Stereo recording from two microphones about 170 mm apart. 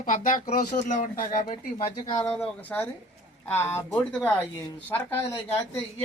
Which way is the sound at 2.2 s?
10° left (ahead or behind).